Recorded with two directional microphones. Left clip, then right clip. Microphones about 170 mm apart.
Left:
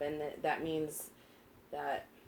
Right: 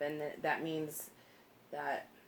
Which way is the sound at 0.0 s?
15° right (ahead or behind).